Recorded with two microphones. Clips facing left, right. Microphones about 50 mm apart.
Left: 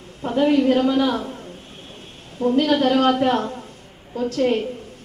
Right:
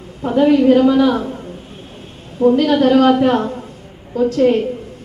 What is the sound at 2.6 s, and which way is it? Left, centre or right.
A man's voice, centre.